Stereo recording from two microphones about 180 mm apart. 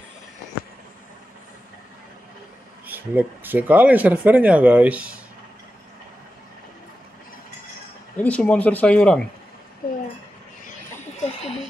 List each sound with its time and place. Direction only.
2.9 s speech: 10° right (ahead or behind)
8.2 s speech: 5° left (ahead or behind)
11.0 s a sound: 35° left (ahead or behind)